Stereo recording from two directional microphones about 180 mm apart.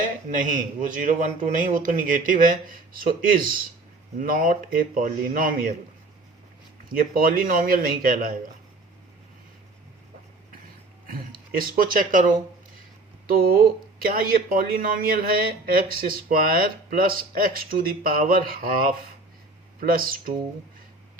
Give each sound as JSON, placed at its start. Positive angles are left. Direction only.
{"t": 0.0, "sound": "speech", "side_deg": -45}
{"t": 6.8, "sound": "speech", "side_deg": -50}
{"t": 11.1, "sound": "speech", "side_deg": -50}
{"t": 13.2, "sound": "speech", "side_deg": -55}